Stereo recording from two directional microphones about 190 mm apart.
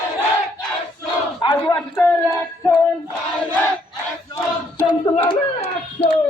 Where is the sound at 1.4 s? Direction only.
20° left (ahead or behind).